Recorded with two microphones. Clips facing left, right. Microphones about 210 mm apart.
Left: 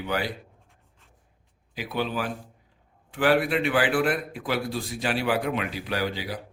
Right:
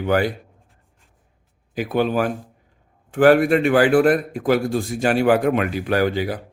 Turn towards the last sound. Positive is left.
turn(degrees=-50)  # may be behind; listen again after turning